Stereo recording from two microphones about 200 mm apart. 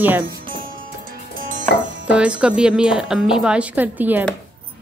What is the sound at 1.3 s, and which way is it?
Chopping, 40° right (ahead or behind).